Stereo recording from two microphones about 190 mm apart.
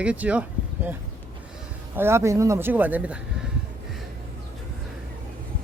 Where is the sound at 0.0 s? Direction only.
5° right (ahead or behind).